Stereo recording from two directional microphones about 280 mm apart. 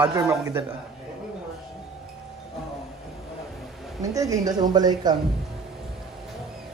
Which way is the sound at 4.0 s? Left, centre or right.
Centre.